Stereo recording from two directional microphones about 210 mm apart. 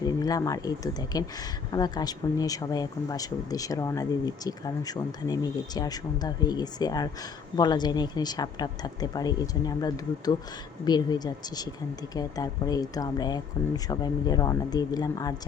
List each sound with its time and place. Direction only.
0.0 s speech: 15° left (ahead or behind)